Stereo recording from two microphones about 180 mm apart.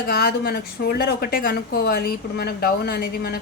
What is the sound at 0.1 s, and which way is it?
Speech, 60° left (ahead or behind).